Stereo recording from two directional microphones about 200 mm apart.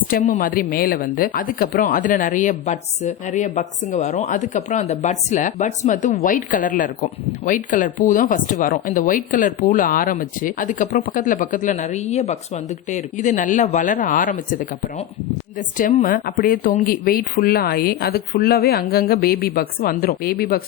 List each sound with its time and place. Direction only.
0.1 s a woman's voice: 40° left (ahead or behind)